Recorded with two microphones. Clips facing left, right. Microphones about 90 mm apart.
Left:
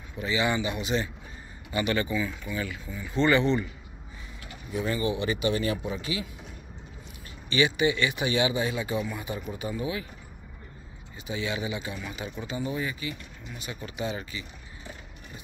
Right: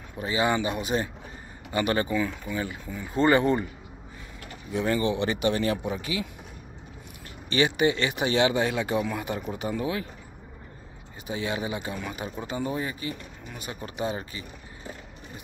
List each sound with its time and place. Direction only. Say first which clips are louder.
0.2 s speech: right 2 dB; 40° right (ahead or behind)
2.5 s speech: right 2 dB; 35° right (ahead or behind)
2.9 s speech: right 2 dB; 45° right (ahead or behind)
4.7 s speech: right 3 dB; 50° right (ahead or behind)
7.4 s speech: right 1 dB; 50° right (ahead or behind)
11.2 s speech: right 1 dB; 40° right (ahead or behind)